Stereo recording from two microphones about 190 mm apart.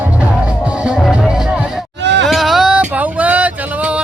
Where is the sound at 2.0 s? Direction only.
65° right (ahead or behind).